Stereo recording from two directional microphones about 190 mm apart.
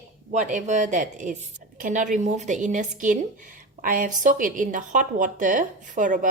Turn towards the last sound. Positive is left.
turn(degrees=-40)  # may be behind; listen again after turning